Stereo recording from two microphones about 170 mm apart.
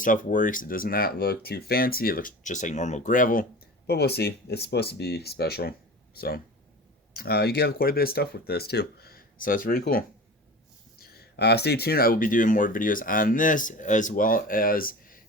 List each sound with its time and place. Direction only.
0.0 s speech: 50° left (ahead or behind)
3.8 s speech: 70° left (ahead or behind)
11.0 s speech: 70° left (ahead or behind); by 15.2 s 55° left (ahead or behind)